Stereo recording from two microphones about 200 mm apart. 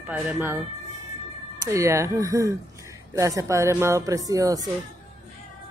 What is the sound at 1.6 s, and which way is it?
Speech, 15° right (ahead or behind).